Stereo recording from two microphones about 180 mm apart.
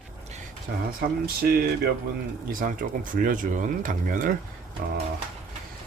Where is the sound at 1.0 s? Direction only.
55° right (ahead or behind).